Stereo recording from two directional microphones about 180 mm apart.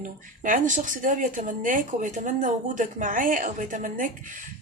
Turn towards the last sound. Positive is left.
turn(degrees=-45)  # may be behind; listen again after turning